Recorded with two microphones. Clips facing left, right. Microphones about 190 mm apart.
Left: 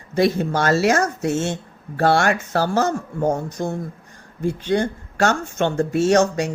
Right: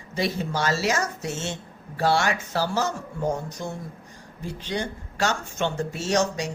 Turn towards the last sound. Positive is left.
turn(degrees=55)  # may be behind; listen again after turning